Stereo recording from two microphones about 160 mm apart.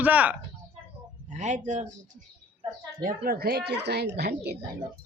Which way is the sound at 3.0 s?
65° right (ahead or behind).